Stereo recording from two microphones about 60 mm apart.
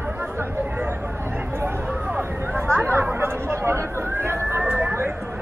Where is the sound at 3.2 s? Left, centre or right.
Right.